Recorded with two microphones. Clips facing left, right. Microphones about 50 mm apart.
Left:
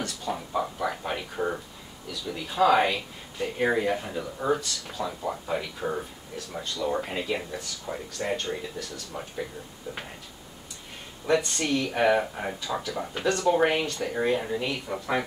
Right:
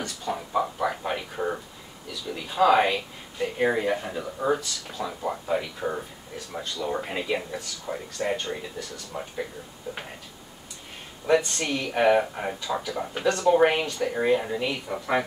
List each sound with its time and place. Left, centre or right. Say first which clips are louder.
0.0 s a sound: right 1 dB; centre
2.0 s speech: even; centre
9.9 s speech: right 1 dB; centre
11.2 s speech: right 2 dB; centre